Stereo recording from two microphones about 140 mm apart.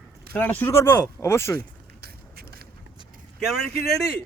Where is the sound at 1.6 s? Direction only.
90° right.